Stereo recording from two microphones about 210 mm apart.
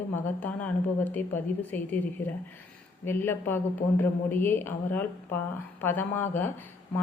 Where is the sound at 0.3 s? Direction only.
10° left (ahead or behind).